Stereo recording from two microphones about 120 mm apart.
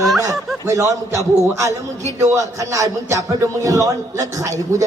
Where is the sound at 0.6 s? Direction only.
25° right (ahead or behind).